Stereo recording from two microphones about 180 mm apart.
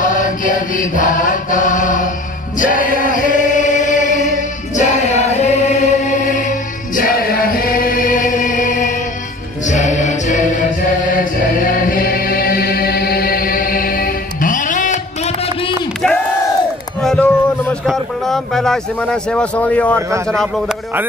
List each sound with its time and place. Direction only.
0.0 s chant: 45° left (ahead or behind)
2.6 s choir: 45° left (ahead or behind)
9.7 s music: 40° left (ahead or behind)
11.6 s music: 55° left (ahead or behind)
15.2 s a sound: 35° left (ahead or behind)
17.0 s a sound: 5° left (ahead or behind)
20.2 s a man's voice: centre (ahead or behind)